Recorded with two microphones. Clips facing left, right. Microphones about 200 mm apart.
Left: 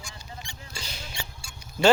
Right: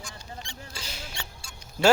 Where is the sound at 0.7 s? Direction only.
5° right (ahead or behind).